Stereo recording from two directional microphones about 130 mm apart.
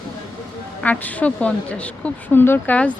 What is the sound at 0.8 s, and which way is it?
Speech, 10° left (ahead or behind).